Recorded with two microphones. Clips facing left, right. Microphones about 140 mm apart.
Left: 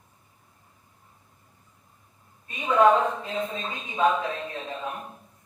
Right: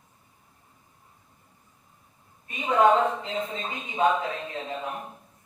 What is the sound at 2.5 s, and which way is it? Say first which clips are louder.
Speech: left 1 dB; 25° right (ahead or behind).